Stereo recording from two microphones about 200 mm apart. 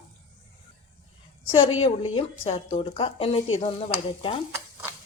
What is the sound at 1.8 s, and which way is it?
A woman's voice, 25° left (ahead or behind).